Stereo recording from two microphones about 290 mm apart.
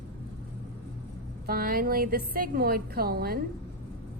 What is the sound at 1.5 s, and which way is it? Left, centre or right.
A woman's voice, right.